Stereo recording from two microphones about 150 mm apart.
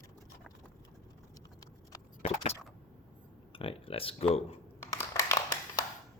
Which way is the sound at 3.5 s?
35° left (ahead or behind).